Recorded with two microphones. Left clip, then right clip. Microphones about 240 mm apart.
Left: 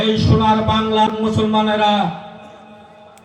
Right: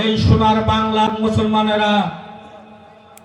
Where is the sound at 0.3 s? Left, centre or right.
Right.